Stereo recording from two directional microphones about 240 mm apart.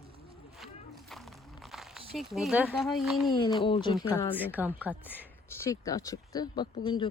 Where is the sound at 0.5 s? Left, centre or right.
Centre.